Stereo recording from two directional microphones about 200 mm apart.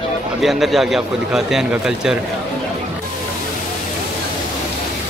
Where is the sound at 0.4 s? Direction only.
Centre (ahead or behind).